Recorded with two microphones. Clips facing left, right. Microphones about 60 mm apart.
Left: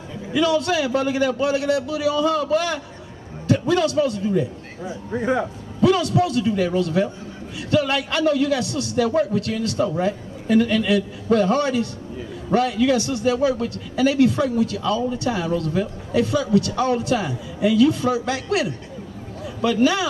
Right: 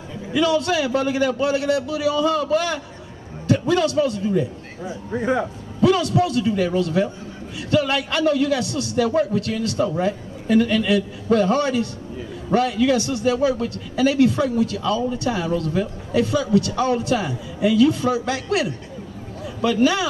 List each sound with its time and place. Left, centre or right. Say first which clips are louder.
0.3 s a man's voice: even; centre
4.3 s a man's voice: even; right